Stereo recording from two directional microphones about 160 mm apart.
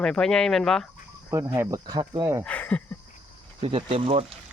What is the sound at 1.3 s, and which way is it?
Speech, 20° right (ahead or behind).